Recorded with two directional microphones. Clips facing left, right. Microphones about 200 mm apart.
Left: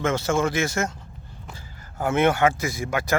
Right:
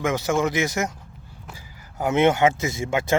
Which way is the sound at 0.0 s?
15° right (ahead or behind).